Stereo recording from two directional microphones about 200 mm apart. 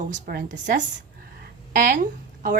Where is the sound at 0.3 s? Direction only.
50° right (ahead or behind).